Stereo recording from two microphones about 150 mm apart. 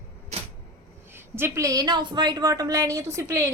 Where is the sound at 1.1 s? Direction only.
15° right (ahead or behind).